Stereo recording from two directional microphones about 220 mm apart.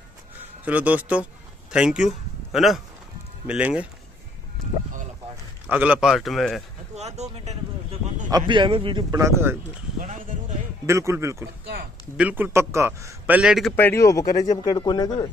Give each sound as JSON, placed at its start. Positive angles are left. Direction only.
{"t": 0.7, "sound": "a man's voice", "side_deg": -5}
{"t": 4.6, "sound": "a sound", "side_deg": 0}
{"t": 5.7, "sound": "speech", "side_deg": -5}
{"t": 7.0, "sound": "speech", "side_deg": -30}
{"t": 8.3, "sound": "a man's voice", "side_deg": -20}
{"t": 10.9, "sound": "a man's voice", "side_deg": -15}
{"t": 11.6, "sound": "speech", "side_deg": -45}
{"t": 12.2, "sound": "a man's voice", "side_deg": -10}